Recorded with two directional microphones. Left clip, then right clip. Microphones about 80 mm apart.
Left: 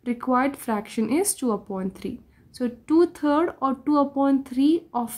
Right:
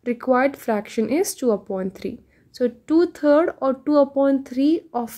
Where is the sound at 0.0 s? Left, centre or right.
Right.